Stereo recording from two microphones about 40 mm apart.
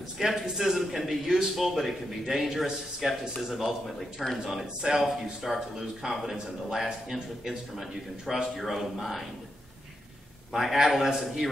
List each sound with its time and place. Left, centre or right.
0.2 s a man's voice: centre
6.0 s a man's voice: centre
6.7 s a man's voice: centre
10.5 s a man's voice: centre